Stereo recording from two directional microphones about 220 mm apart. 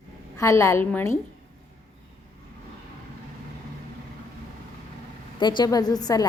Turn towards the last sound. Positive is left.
turn(degrees=15)  # may be behind; listen again after turning